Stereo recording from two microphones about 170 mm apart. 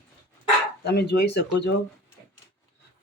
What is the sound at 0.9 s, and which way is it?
Speech, 75° left (ahead or behind).